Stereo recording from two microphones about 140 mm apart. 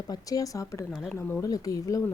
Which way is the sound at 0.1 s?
25° left (ahead or behind).